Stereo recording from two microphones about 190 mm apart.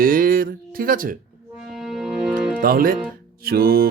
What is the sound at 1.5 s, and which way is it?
Music, centre (ahead or behind).